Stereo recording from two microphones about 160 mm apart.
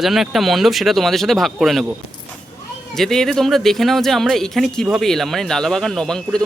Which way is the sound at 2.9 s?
5° left (ahead or behind).